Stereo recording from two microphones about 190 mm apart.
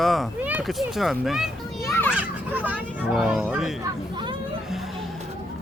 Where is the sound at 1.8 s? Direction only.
10° left (ahead or behind).